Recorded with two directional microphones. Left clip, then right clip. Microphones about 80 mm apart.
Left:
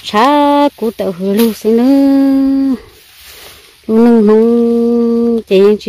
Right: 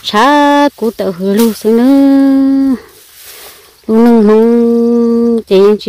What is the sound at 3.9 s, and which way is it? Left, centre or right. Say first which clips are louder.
Speech: right 1 dB; centre.